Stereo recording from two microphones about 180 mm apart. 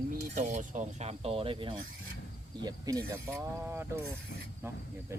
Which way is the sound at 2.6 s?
20° right (ahead or behind).